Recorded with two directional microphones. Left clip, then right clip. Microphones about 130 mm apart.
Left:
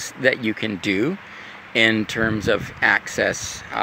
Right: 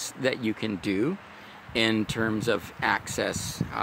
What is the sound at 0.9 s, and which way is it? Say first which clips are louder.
Speech: left 6 dB; 5° right (ahead or behind).